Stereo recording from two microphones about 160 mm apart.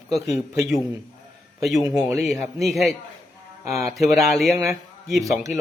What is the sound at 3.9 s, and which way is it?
Speech, centre (ahead or behind).